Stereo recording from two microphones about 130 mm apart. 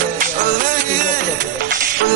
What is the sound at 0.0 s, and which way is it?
Music, 90° right.